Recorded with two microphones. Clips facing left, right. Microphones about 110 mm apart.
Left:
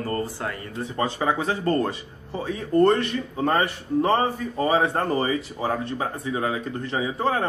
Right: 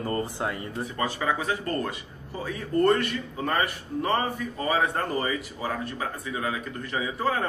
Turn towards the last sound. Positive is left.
turn(degrees=25)  # may be behind; listen again after turning